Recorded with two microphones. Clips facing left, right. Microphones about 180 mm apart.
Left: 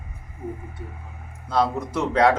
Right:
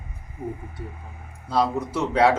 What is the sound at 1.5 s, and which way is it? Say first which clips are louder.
Speech: even; 10° right (ahead or behind).